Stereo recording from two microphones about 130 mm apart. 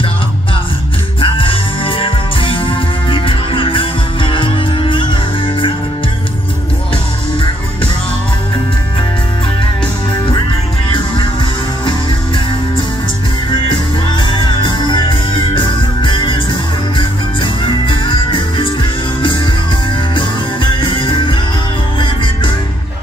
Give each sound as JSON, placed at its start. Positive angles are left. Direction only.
{"t": 1.2, "sound": "music", "side_deg": 40}
{"t": 13.7, "sound": "music", "side_deg": 40}
{"t": 20.8, "sound": "music", "side_deg": 40}